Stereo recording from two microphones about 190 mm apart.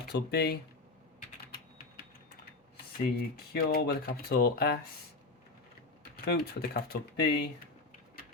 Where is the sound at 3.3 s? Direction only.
55° left (ahead or behind).